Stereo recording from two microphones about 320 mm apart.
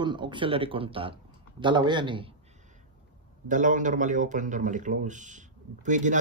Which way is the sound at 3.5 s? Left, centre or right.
Right.